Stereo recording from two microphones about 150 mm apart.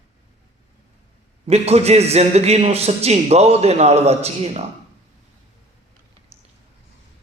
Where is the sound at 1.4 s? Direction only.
45° right (ahead or behind).